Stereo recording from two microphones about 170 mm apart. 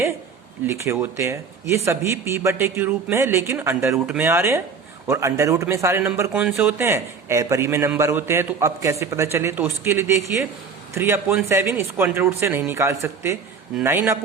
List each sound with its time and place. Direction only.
0.9 s a man's voice: 10° right (ahead or behind)